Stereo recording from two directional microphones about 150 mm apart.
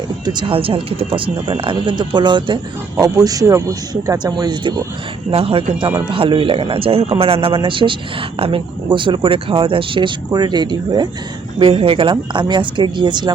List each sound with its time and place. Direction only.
0.3 s speech: 35° right (ahead or behind)
5.3 s speech: 40° right (ahead or behind)